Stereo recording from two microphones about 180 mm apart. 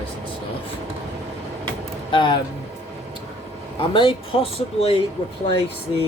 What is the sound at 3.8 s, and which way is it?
Speech, 30° left (ahead or behind).